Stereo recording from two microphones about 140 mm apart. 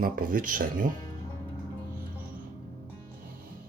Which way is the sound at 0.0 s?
85° right.